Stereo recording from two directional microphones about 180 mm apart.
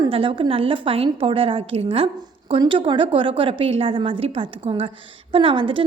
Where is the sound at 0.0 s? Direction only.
30° right (ahead or behind).